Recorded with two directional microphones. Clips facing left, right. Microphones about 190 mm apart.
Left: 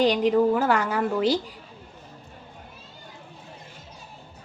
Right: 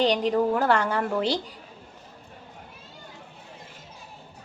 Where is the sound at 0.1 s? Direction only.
35° right (ahead or behind).